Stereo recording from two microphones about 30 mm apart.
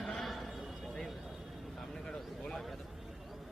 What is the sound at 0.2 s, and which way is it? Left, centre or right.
Neigh, centre.